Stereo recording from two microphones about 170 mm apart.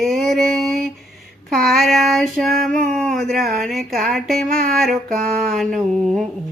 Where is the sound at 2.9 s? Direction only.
5° left (ahead or behind).